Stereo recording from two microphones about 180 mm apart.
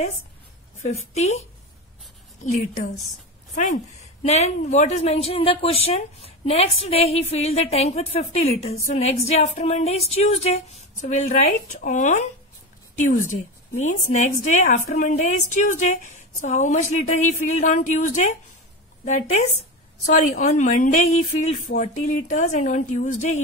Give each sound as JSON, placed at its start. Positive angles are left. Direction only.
{"t": 0.7, "sound": "speech", "side_deg": 40}
{"t": 2.4, "sound": "speech", "side_deg": 40}
{"t": 4.3, "sound": "speech", "side_deg": 40}
{"t": 20.1, "sound": "a woman's voice", "side_deg": 45}